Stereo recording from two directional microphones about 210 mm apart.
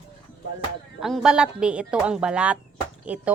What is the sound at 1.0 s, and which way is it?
Speech, centre (ahead or behind).